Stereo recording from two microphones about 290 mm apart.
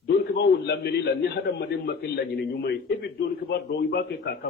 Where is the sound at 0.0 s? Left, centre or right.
Left.